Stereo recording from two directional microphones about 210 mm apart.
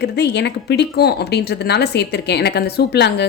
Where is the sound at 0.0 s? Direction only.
55° left (ahead or behind).